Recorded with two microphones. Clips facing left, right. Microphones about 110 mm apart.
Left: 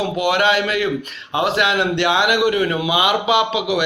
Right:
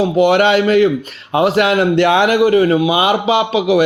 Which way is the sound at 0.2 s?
40° right (ahead or behind).